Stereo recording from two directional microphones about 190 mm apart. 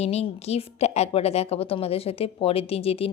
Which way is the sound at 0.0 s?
35° left (ahead or behind).